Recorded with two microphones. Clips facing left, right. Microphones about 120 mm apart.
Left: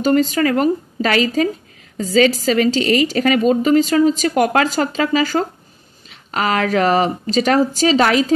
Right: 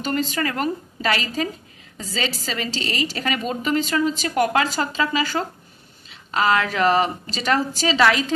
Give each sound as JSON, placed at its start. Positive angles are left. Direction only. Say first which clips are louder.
{"t": 0.0, "sound": "a woman's voice", "louder": "left 9 dB", "side_deg": 40}